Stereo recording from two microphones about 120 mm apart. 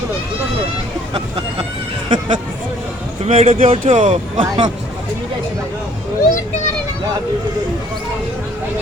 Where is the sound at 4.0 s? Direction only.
90° right.